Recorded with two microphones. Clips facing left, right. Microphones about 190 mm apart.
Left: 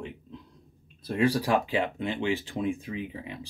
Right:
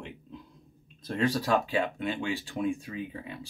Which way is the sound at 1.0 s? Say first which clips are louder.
Left 3 dB; 10° left (ahead or behind).